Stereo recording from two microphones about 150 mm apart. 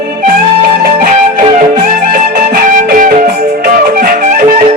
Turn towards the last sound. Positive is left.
turn(degrees=-75)  # may be behind; listen again after turning